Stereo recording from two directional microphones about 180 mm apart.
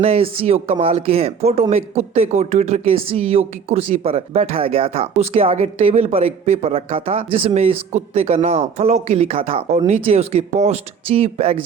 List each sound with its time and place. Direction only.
0.0 s speech: 30° right (ahead or behind)